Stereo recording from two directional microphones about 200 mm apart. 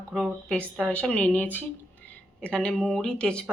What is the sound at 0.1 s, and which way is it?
Speech, centre (ahead or behind).